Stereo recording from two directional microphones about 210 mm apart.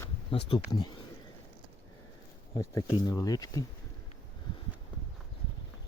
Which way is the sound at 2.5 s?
15° left (ahead or behind).